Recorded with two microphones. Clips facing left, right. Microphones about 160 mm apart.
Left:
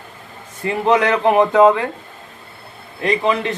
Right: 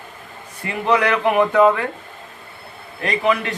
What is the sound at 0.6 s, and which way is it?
A man's voice, 30° left (ahead or behind).